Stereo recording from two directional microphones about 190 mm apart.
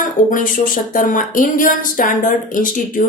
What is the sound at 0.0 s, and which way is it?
Speech, 45° left (ahead or behind).